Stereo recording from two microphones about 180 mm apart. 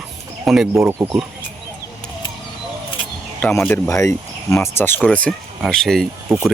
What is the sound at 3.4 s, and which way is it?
Speech, 10° left (ahead or behind).